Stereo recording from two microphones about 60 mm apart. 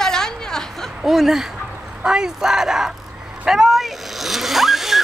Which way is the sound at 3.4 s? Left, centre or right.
Centre.